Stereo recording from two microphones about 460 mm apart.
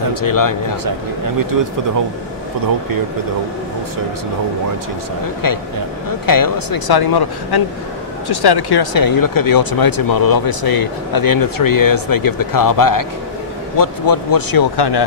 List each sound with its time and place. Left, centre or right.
0.1 s speech: left
6.2 s speech: left